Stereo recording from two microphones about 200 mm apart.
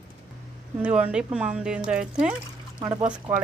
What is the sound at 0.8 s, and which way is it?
Speech, 5° right (ahead or behind).